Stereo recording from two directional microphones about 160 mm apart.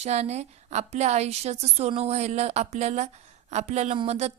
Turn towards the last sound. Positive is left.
turn(degrees=-40)  # may be behind; listen again after turning